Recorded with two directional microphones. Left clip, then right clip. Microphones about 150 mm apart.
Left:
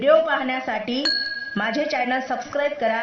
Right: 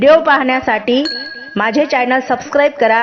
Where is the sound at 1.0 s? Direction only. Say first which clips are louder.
Right 3 dB; centre (ahead or behind).